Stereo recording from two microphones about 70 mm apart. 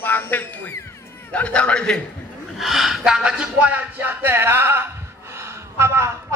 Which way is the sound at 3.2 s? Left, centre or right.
Centre.